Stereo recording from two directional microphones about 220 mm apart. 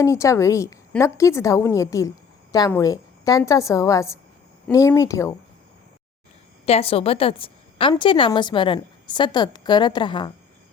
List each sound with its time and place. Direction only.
0.0 s a woman's voice: 15° left (ahead or behind)
6.7 s a woman's voice: 25° left (ahead or behind)